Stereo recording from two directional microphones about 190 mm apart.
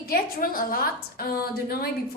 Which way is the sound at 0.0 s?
50° left (ahead or behind).